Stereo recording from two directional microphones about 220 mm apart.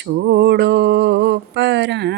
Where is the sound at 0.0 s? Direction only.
55° right (ahead or behind).